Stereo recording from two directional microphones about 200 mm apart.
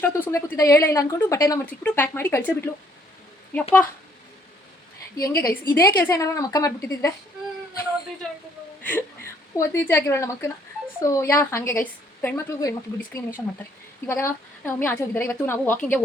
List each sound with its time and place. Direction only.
0.0 s a woman's voice: 10° left (ahead or behind)
5.1 s a woman's voice: 15° left (ahead or behind)
8.8 s a woman's voice: 10° left (ahead or behind)